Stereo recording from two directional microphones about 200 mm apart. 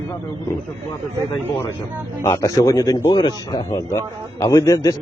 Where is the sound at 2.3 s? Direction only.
15° left (ahead or behind).